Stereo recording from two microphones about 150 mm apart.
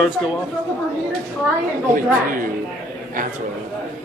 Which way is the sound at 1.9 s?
65° right (ahead or behind).